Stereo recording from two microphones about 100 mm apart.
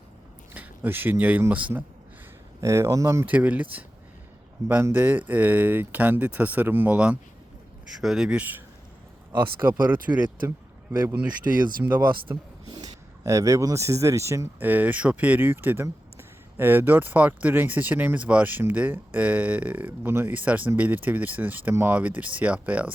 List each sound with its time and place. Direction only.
0.5 s speech: 15° right (ahead or behind)
2.6 s speech: 30° right (ahead or behind)
3.2 s speech: 15° right (ahead or behind)
9.6 s speech: 25° right (ahead or behind)
11.5 s speech: 35° right (ahead or behind)
11.9 s speech: 20° right (ahead or behind)
12.7 s speech: 35° right (ahead or behind); by 22.9 s 15° right (ahead or behind)